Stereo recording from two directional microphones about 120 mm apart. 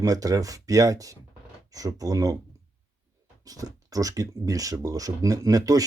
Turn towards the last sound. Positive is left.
turn(degrees=-30)  # may be behind; listen again after turning